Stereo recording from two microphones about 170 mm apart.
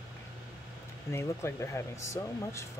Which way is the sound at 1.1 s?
15° left (ahead or behind).